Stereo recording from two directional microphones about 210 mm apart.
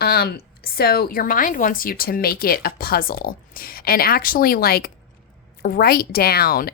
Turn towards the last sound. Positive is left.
turn(degrees=45)  # may be behind; listen again after turning